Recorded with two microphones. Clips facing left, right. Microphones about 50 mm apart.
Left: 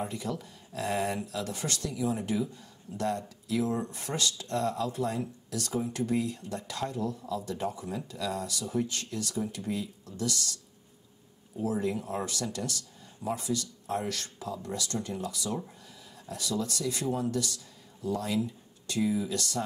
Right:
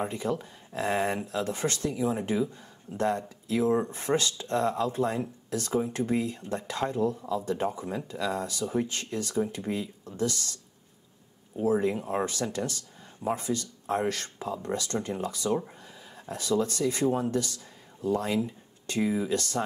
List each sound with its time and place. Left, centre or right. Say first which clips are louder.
0.0 s speech: right 4 dB; right